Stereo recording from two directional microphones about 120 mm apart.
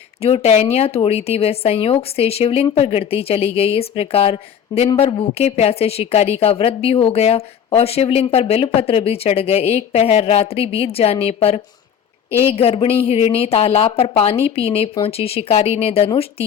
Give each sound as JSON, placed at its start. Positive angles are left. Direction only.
{"t": 0.2, "sound": "a woman's voice", "side_deg": 55}
{"t": 5.0, "sound": "a woman's voice", "side_deg": 45}